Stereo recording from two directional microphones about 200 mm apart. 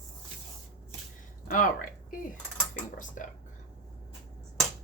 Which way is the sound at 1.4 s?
40° left (ahead or behind).